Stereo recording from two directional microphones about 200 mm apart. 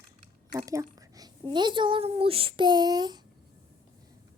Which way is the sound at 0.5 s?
15° right (ahead or behind).